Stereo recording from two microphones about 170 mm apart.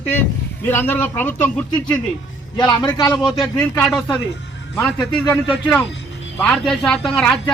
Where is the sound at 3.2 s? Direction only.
Centre (ahead or behind).